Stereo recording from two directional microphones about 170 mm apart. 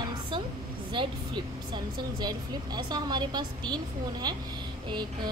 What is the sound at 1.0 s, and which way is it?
Speech, 30° right (ahead or behind).